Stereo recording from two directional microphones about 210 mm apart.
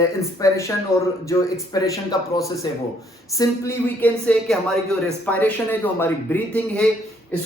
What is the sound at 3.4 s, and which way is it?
Speech, 10° left (ahead or behind).